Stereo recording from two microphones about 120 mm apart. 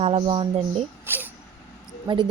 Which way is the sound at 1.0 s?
15° right (ahead or behind).